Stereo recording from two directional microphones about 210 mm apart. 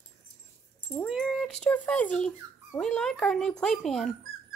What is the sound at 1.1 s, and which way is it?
Speech, centre (ahead or behind).